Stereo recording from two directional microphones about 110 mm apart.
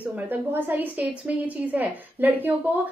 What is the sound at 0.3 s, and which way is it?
A woman's voice, 15° right (ahead or behind).